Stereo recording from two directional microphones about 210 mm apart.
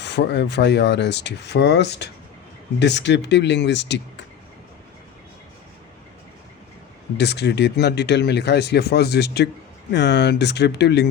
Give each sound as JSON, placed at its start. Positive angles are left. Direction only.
{"t": 0.0, "sound": "speech", "side_deg": 55}
{"t": 7.2, "sound": "speech", "side_deg": 55}